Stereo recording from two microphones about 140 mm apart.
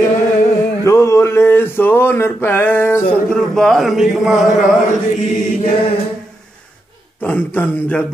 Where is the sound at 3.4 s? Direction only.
5° left (ahead or behind).